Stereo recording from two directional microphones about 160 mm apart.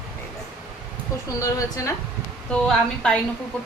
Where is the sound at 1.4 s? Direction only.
20° left (ahead or behind).